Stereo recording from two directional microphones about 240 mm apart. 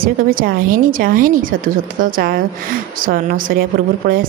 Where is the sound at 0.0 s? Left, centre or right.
Right.